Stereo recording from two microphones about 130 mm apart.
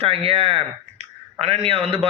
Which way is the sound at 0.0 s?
50° right (ahead or behind).